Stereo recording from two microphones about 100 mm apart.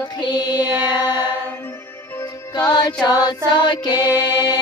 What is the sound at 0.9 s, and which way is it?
Mantra, 45° left (ahead or behind).